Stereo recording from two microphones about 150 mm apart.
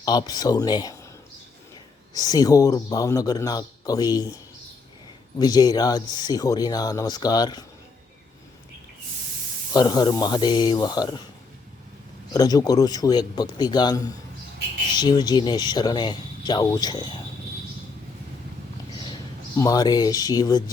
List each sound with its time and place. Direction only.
0.0 s speech: 25° left (ahead or behind)
2.1 s speech: 25° left (ahead or behind)
5.4 s speech: 25° left (ahead or behind)
9.7 s speech: 25° left (ahead or behind)
12.3 s speech: 25° left (ahead or behind)
19.0 s speech: 25° left (ahead or behind)